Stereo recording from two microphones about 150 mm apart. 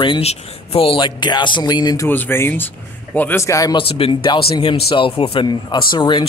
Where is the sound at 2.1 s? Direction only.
15° left (ahead or behind).